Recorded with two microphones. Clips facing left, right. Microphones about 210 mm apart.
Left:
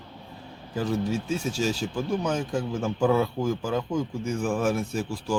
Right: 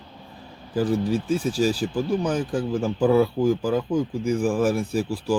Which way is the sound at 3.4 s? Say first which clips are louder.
Right 6 dB; 35° right (ahead or behind).